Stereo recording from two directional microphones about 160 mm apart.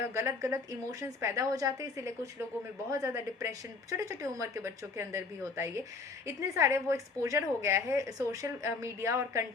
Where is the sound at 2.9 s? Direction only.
20° right (ahead or behind).